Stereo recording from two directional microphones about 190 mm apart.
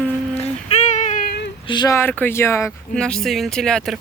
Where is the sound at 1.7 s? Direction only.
25° left (ahead or behind).